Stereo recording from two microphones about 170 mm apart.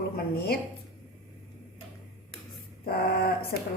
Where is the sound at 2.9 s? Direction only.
65° left (ahead or behind).